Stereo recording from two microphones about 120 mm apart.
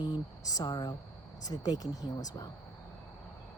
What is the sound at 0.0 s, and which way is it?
Speech, 35° left (ahead or behind).